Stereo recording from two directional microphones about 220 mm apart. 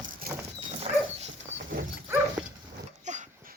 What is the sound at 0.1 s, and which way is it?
Dog, 40° right (ahead or behind).